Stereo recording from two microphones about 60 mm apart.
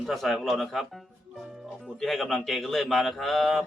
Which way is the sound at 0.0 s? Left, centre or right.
Centre.